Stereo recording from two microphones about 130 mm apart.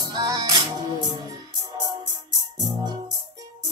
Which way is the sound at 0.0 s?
30° right (ahead or behind).